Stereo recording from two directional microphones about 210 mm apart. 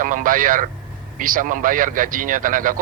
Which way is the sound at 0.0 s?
40° right (ahead or behind).